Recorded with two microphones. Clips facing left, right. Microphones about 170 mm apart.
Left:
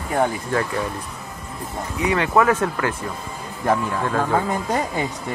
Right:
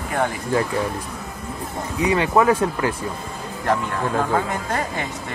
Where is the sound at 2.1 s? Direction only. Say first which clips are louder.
Even; 25° right (ahead or behind).